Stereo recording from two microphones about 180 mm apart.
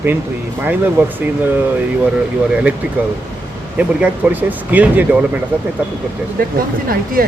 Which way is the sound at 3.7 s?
10° right (ahead or behind).